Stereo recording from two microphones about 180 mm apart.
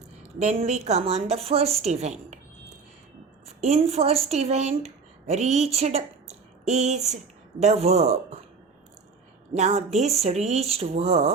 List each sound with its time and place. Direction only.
0.3 s a woman's voice: 35° right (ahead or behind)
3.4 s a woman's voice: 35° right (ahead or behind)
9.6 s a woman's voice: 40° right (ahead or behind)